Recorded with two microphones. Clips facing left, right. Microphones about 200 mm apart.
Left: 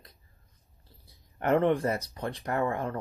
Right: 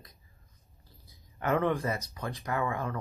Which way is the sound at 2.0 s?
30° left (ahead or behind).